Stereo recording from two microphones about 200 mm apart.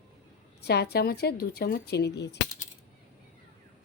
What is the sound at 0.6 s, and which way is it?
Speech, 55° left (ahead or behind).